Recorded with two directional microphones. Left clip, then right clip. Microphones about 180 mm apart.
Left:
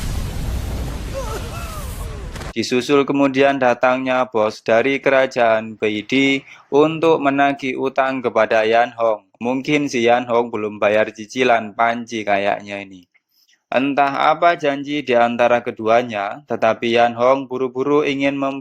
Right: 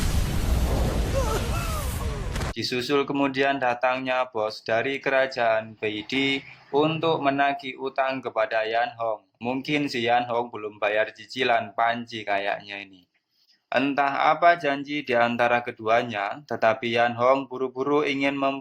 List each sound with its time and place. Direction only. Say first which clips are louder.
0.0 s a sound: even; centre (ahead or behind)
2.6 s speech: left 9 dB; 30° left (ahead or behind)
13.9 s speech: left 6 dB; 35° left (ahead or behind)
18.3 s speech: left 3 dB; 15° left (ahead or behind)